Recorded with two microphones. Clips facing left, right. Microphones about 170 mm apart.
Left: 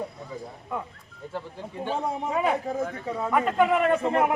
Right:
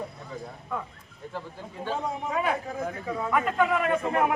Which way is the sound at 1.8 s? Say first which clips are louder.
Left 2 dB; 20° left (ahead or behind).